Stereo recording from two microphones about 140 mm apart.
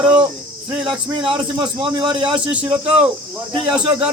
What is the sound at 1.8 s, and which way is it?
Speech, 5° right (ahead or behind).